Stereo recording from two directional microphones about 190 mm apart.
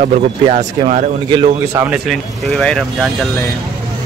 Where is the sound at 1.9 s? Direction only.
Centre (ahead or behind).